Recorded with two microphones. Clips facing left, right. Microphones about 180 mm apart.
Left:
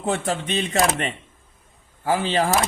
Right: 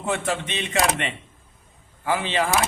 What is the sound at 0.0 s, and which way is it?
Speech, 35° left (ahead or behind).